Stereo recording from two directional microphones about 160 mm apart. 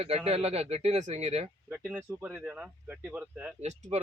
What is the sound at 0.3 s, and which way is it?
Speech, 40° right (ahead or behind).